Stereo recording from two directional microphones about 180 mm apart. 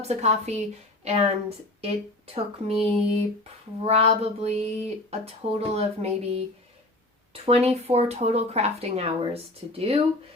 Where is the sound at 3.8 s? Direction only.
35° right (ahead or behind).